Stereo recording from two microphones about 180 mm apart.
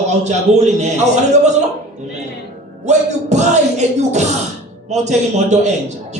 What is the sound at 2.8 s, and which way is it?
Speech, 40° right (ahead or behind).